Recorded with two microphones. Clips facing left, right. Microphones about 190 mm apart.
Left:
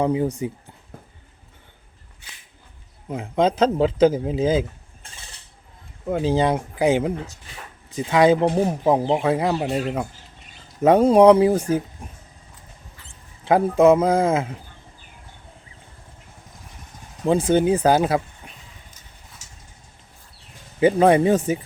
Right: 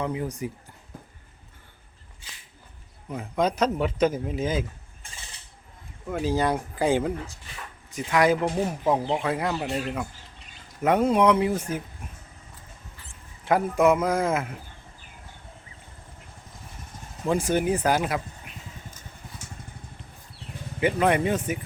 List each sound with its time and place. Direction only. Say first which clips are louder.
0.0 s a man's voice: left 8 dB; 25° left (ahead or behind)
3.1 s a man's voice: left 5 dB; 25° left (ahead or behind)
6.1 s a man's voice: left 5 dB; 25° left (ahead or behind)
13.4 s a man's voice: left 5 dB; 30° left (ahead or behind)
17.2 s a man's voice: left 6 dB; 25° left (ahead or behind)
18.9 s vehicle: right 5 dB; 55° right (ahead or behind)
20.8 s a man's voice: left 7 dB; 30° left (ahead or behind)